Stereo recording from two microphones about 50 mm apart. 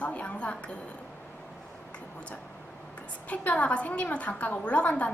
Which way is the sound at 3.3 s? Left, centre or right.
Left.